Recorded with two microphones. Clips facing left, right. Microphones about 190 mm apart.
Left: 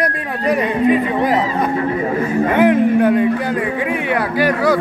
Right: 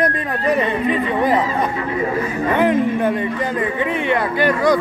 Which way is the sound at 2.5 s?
10° left (ahead or behind).